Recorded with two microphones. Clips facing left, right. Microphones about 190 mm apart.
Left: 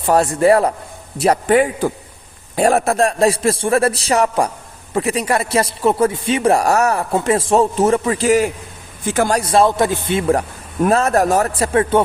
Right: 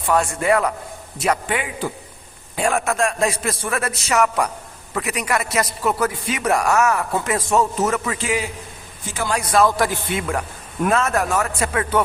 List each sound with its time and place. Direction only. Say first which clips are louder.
0.0 s a man's voice: left 6 dB; 35° left (ahead or behind)
9.4 s a man's voice: right 1 dB; 30° left (ahead or behind)